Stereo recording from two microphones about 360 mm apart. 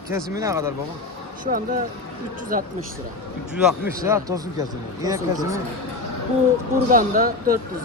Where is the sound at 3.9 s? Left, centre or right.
Centre.